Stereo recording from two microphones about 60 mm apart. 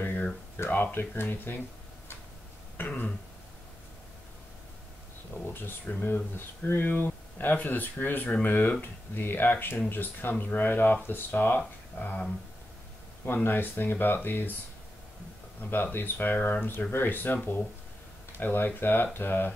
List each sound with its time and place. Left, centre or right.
0.0 s a sound: left
0.9 s speech: left
2.8 s speech: left
5.5 s speech: left
15.7 s speech: left
18.4 s speech: left